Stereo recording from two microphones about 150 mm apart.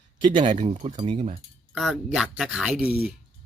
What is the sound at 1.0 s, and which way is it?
Speech, 35° right (ahead or behind).